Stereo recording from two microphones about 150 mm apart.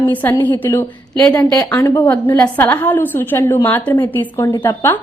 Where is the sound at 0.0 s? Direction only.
15° left (ahead or behind).